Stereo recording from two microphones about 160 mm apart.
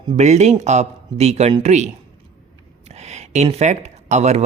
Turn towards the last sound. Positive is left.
turn(degrees=-45)  # may be behind; listen again after turning